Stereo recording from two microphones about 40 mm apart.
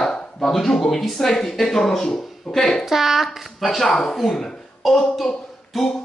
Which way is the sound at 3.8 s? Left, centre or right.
Centre.